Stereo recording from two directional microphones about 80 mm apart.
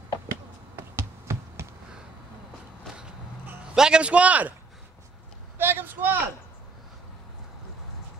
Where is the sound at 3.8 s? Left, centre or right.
Centre.